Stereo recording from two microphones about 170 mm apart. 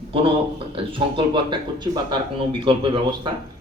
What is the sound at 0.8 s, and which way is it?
Speech, 30° right (ahead or behind).